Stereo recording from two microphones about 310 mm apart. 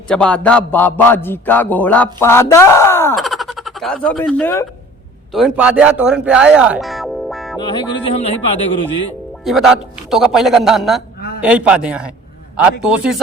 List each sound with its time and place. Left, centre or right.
0.1 s a man's voice: centre
7.6 s speech: centre
9.4 s a man's voice: centre